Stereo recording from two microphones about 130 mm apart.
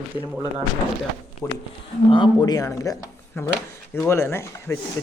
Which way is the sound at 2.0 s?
35° left (ahead or behind).